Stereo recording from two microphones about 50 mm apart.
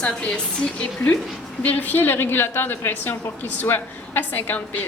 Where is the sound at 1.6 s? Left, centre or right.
Left.